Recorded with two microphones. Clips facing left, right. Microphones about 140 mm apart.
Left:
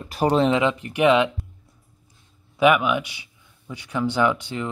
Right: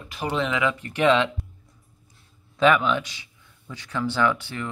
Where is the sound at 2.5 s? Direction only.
10° left (ahead or behind).